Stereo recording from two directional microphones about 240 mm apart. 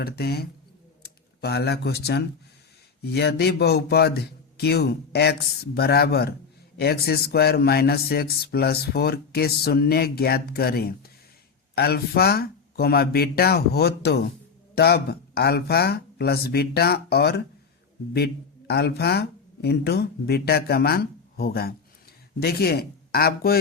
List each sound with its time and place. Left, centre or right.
0.0 s speech: left
18.7 s speech: left